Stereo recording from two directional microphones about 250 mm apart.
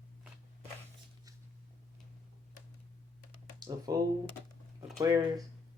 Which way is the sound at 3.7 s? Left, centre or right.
Centre.